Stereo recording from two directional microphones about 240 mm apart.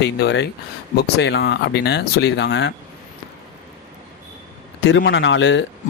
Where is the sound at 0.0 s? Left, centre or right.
Left.